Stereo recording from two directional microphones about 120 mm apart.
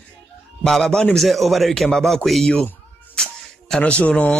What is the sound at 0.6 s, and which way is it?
A man's voice, 5° left (ahead or behind).